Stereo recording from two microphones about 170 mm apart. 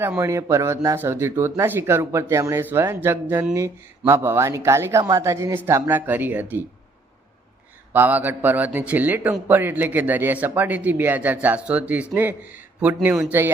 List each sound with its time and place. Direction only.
0.0 s a man's voice: 15° right (ahead or behind)
7.9 s a man's voice: 10° right (ahead or behind)